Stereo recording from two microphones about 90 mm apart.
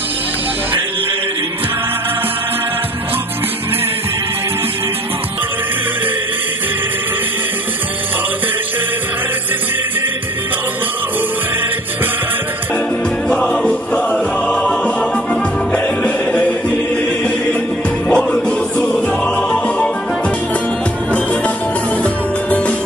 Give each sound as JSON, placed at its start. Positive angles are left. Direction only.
{"t": 13.3, "sound": "music", "side_deg": 10}
{"t": 18.0, "sound": "music", "side_deg": 5}
{"t": 22.0, "sound": "music", "side_deg": 15}